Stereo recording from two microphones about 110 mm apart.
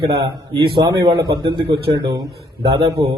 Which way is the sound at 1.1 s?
50° right (ahead or behind).